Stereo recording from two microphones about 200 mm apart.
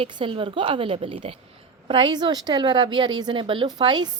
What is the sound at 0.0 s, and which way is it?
A woman's voice, 25° right (ahead or behind).